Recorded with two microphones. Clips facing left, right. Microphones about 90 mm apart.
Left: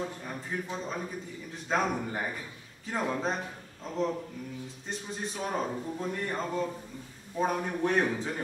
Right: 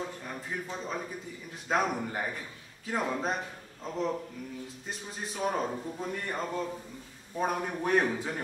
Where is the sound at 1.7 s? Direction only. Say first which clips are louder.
Right 1 dB; 5° right (ahead or behind).